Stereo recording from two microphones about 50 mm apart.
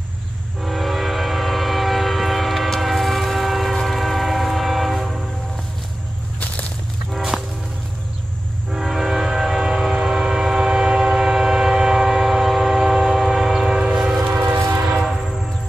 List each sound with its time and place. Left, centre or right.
0.6 s train: centre
7.1 s train: centre
8.7 s train: centre
14.3 s train: right